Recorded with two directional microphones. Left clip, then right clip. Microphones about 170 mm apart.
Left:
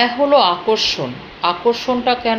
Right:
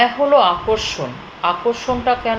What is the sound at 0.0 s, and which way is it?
A woman's voice, 25° left (ahead or behind).